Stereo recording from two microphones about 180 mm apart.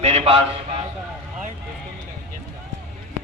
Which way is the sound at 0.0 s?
35° right (ahead or behind).